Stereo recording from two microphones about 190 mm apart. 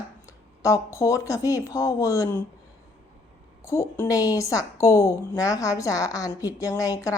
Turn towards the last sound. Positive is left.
turn(degrees=20)  # may be behind; listen again after turning